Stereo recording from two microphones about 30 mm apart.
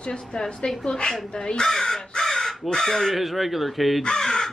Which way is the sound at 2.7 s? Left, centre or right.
Centre.